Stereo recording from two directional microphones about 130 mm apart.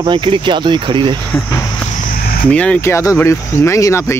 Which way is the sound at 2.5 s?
10° left (ahead or behind).